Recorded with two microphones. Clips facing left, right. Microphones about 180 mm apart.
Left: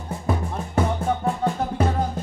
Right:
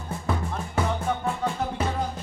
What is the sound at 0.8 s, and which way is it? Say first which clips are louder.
Music: left 4 dB; 40° left (ahead or behind).